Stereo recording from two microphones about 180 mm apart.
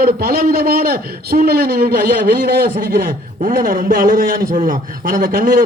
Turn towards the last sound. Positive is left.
turn(degrees=-50)  # may be behind; listen again after turning